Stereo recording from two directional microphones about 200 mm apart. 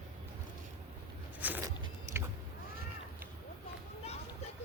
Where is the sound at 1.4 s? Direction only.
10° right (ahead or behind).